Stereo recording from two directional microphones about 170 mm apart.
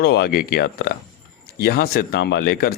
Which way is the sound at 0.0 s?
75° left (ahead or behind).